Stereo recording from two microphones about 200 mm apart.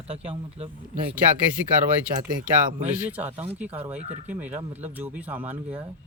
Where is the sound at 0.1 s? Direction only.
30° right (ahead or behind).